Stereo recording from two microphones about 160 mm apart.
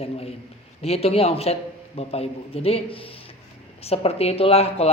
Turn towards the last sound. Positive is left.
turn(degrees=40)  # may be behind; listen again after turning